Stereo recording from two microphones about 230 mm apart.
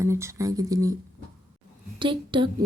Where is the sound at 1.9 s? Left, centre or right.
Right.